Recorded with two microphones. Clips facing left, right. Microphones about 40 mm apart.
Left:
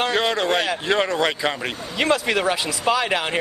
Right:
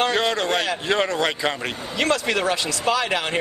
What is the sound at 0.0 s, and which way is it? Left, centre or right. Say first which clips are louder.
Speech: even; centre.